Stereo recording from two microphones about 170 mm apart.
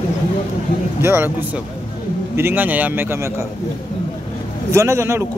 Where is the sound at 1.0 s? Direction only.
15° right (ahead or behind).